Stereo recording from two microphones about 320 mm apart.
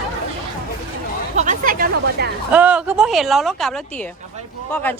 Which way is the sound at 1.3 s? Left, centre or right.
Right.